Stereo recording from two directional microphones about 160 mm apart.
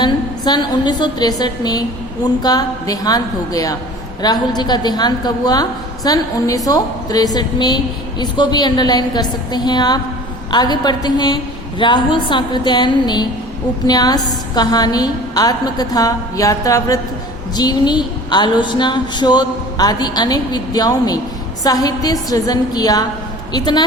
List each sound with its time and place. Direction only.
0.0 s a woman's voice: 25° left (ahead or behind)